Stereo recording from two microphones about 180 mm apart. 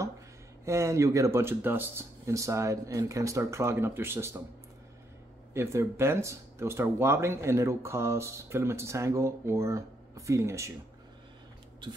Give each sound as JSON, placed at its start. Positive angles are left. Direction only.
{"t": 0.7, "sound": "speech", "side_deg": -15}
{"t": 5.5, "sound": "speech", "side_deg": -15}